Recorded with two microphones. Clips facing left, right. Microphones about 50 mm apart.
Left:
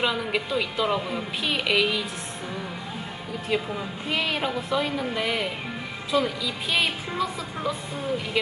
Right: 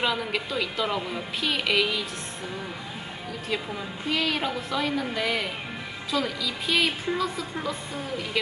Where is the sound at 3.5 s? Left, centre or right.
Centre.